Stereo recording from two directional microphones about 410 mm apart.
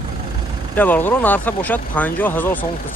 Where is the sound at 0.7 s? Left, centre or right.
Centre.